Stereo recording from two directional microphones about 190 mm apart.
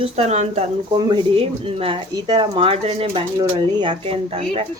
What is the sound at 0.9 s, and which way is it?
Speech, 25° right (ahead or behind).